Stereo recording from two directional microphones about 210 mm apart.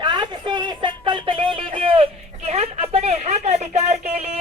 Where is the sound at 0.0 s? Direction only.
20° right (ahead or behind).